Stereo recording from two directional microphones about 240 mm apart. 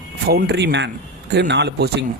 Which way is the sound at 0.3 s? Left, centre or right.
Right.